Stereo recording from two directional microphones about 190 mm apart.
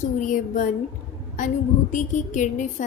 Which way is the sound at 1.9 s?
40° left (ahead or behind).